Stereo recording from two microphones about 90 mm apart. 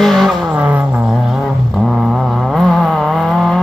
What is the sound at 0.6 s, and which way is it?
Vehicle, 15° right (ahead or behind).